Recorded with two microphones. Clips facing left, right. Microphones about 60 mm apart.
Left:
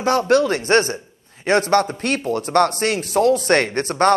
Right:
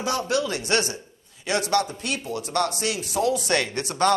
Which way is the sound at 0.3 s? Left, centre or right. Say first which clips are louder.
Left 9 dB; left.